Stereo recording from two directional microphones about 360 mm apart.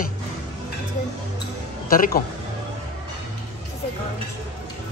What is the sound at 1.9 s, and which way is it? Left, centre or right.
Speech, left.